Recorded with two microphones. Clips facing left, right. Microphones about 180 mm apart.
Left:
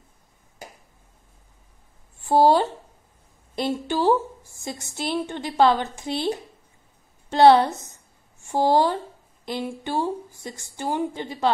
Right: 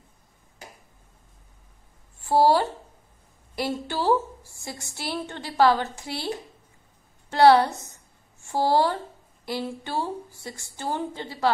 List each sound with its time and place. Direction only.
2.2 s a woman's voice: 20° left (ahead or behind)